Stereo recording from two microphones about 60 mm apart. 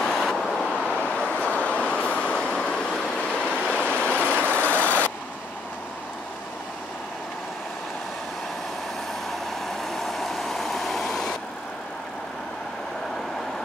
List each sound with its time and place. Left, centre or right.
0.0 s vehicle: centre; by 5.1 s left
9.3 s vehicle: centre